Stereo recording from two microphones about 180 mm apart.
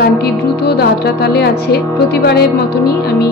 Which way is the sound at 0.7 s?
60° left (ahead or behind).